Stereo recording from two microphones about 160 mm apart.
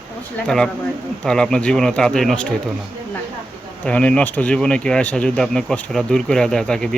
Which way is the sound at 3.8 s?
5° left (ahead or behind).